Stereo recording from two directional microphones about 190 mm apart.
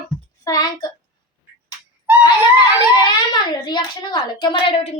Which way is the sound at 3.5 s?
25° left (ahead or behind).